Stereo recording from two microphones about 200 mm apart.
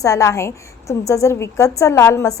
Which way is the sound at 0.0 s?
15° left (ahead or behind).